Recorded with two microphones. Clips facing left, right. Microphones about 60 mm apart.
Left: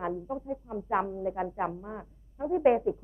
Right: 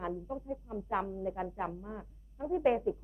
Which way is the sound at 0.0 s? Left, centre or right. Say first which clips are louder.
Left 5 dB; left.